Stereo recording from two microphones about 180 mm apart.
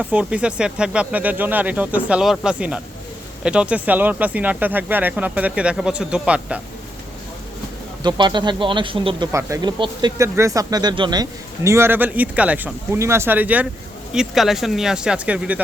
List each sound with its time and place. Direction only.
0.0 s speech: 5° right (ahead or behind)
8.0 s speech: 25° right (ahead or behind); by 15.6 s 5° right (ahead or behind)